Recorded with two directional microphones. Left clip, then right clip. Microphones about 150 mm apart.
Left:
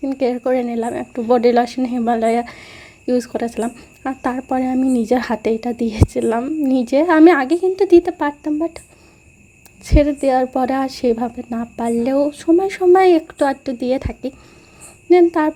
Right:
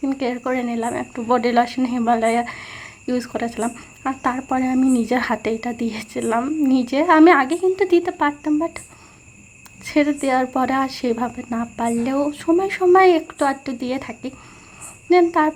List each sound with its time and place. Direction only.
0.0 s speech: 40° left (ahead or behind)
9.8 s a woman's voice: 40° left (ahead or behind)